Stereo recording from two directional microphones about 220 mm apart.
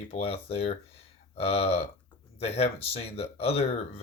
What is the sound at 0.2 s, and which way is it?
Speech, 25° left (ahead or behind).